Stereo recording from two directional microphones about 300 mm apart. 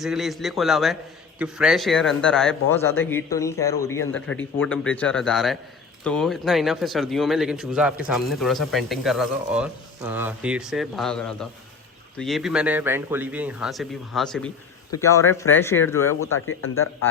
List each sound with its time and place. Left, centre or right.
0.0 s speech: centre
16.2 s a man's voice: left